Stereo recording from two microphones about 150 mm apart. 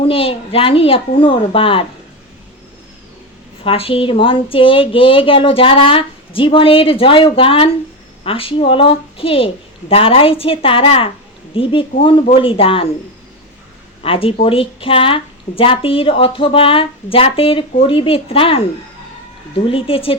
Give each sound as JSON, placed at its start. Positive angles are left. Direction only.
{"t": 0.0, "sound": "speech", "side_deg": 40}
{"t": 3.6, "sound": "speech", "side_deg": 40}
{"t": 14.0, "sound": "speech", "side_deg": 40}
{"t": 19.7, "sound": "speech", "side_deg": 35}